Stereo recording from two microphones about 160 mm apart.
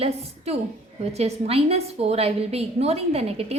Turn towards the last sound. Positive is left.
turn(degrees=-40)  # may be behind; listen again after turning